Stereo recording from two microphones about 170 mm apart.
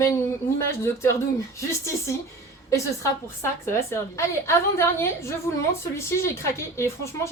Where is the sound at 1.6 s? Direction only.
15° left (ahead or behind).